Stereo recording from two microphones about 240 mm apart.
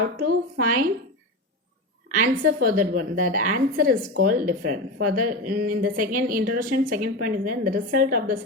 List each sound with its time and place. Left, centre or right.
0.6 s speech: right
2.0 s speech: right